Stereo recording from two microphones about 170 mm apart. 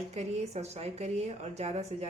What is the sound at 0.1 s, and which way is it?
A woman's voice, 40° right (ahead or behind).